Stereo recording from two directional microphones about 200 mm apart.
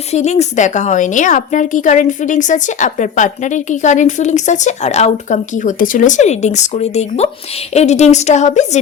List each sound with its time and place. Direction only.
0.1 s a woman's voice: 35° left (ahead or behind)